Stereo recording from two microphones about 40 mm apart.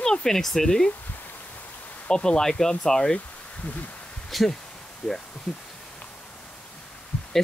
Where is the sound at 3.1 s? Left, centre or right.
Left.